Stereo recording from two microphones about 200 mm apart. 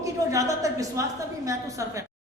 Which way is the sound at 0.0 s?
15° right (ahead or behind).